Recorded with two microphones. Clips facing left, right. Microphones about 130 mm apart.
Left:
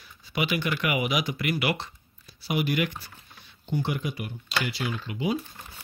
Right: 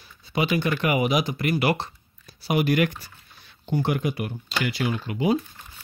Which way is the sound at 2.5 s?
55° right (ahead or behind).